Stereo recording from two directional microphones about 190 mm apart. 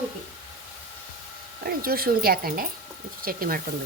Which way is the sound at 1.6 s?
50° right (ahead or behind).